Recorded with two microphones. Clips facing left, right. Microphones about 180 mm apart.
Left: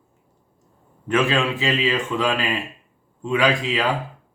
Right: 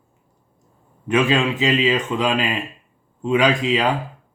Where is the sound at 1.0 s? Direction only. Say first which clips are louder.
Right 2 dB; 15° right (ahead or behind).